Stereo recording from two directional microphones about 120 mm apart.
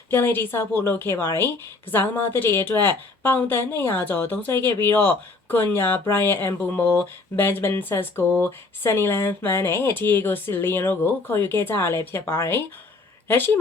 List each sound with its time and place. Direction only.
0.1 s a woman's voice: 15° left (ahead or behind)